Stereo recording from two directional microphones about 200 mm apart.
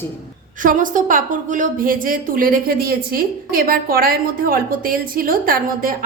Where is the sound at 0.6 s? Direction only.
40° right (ahead or behind).